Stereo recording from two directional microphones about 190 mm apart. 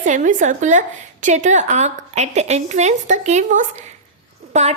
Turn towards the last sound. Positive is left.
turn(degrees=-35)  # may be behind; listen again after turning